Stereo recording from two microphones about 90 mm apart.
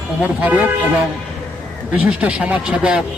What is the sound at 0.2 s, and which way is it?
Speech, 15° right (ahead or behind).